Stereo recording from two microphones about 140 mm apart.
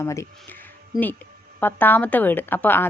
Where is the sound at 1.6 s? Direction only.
15° left (ahead or behind).